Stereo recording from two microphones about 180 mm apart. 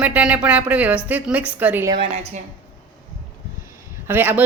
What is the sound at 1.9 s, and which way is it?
Speech, 40° right (ahead or behind).